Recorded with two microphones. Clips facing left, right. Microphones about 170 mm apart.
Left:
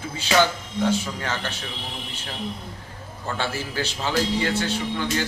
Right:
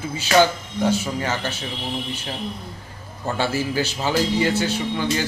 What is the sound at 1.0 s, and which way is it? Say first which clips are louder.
Speech: right 5 dB; 5° right (ahead or behind).